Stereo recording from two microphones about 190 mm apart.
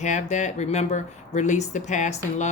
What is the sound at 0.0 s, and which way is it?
Speech, 40° left (ahead or behind).